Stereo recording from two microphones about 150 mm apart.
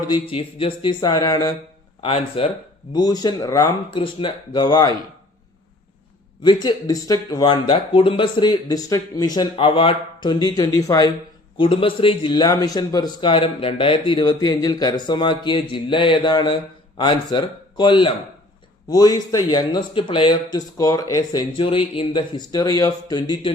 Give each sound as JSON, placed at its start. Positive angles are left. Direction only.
{"t": 0.1, "sound": "a man's voice", "side_deg": 35}
{"t": 2.0, "sound": "a man's voice", "side_deg": 35}
{"t": 2.9, "sound": "speech", "side_deg": 25}
{"t": 6.4, "sound": "speech", "side_deg": 30}
{"t": 11.5, "sound": "a man's voice", "side_deg": 35}